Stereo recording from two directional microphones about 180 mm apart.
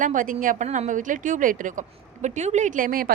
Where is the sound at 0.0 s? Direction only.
50° right (ahead or behind).